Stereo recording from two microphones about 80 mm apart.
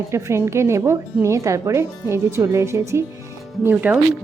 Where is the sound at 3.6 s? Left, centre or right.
Right.